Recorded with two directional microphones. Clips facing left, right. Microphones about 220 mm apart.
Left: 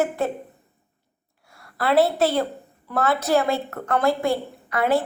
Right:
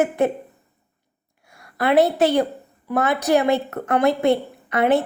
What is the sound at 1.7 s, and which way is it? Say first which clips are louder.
A woman's voice: right 2 dB; 20° right (ahead or behind).